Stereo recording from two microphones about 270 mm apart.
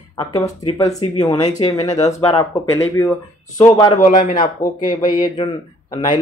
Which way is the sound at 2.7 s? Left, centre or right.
Centre.